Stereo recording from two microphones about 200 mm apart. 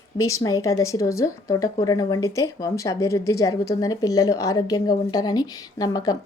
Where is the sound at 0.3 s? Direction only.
15° left (ahead or behind).